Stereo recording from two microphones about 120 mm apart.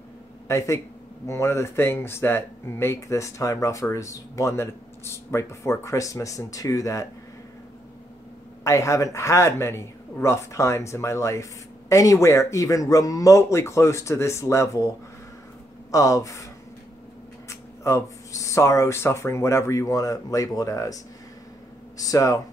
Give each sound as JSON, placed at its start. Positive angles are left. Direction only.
{"t": 0.5, "sound": "a man's voice", "side_deg": 25}
{"t": 8.6, "sound": "speech", "side_deg": 25}
{"t": 15.9, "sound": "speech", "side_deg": 25}
{"t": 17.5, "sound": "speech", "side_deg": 25}